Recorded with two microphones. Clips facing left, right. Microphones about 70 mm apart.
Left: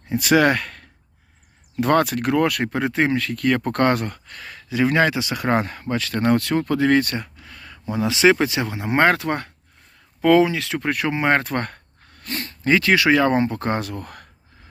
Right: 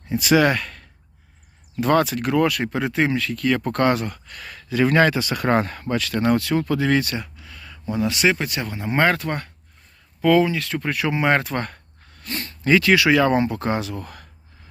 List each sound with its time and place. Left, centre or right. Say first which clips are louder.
0.1 s speech: left 1 dB; left
4.4 s speech: right 1 dB; left
6.0 s speech: left 1 dB; left
7.9 s speech: left 4 dB; left
10.8 s speech: left 1 dB; left
11.1 s speech: even; left
11.4 s speech: left 1 dB; left
12.2 s a sound: left 1 dB; left
12.6 s speech: right 1 dB; left